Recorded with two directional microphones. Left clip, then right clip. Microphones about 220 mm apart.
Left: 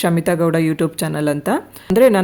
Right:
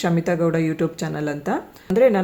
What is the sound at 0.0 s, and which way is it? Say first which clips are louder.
Speech: left 4 dB; 35° left (ahead or behind).